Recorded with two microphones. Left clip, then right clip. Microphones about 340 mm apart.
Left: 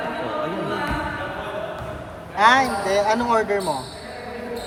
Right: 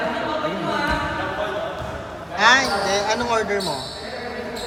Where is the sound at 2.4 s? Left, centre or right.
Left.